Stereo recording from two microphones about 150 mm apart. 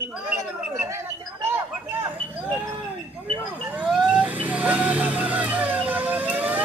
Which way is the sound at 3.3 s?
10° right (ahead or behind).